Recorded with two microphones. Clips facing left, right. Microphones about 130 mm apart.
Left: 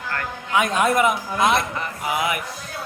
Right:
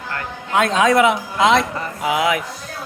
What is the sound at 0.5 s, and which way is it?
A man's voice, 80° right.